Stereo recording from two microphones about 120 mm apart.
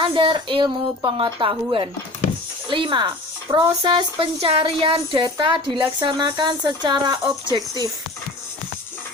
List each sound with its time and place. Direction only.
0.0 s a woman's voice: 45° right (ahead or behind)